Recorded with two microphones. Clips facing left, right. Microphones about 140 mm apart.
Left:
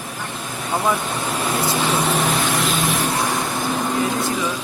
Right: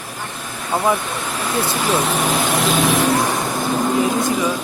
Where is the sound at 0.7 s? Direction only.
20° right (ahead or behind).